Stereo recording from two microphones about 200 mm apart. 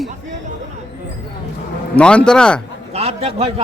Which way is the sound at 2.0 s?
5° left (ahead or behind).